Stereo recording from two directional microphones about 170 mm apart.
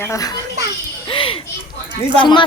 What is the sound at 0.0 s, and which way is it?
Speech, 20° left (ahead or behind).